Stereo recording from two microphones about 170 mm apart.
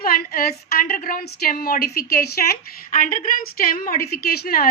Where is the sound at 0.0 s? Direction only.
60° left (ahead or behind).